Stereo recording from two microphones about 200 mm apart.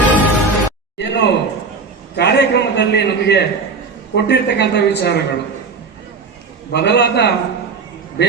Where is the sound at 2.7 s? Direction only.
55° left (ahead or behind).